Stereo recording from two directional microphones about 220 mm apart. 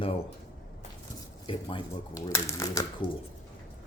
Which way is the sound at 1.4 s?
20° left (ahead or behind).